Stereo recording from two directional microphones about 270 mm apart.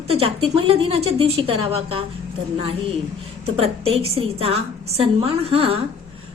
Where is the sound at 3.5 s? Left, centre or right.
Right.